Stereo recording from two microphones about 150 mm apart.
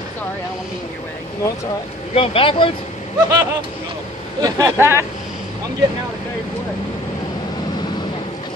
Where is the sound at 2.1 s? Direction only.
40° left (ahead or behind).